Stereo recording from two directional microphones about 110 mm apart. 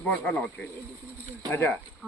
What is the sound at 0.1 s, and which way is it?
Speech, 10° left (ahead or behind).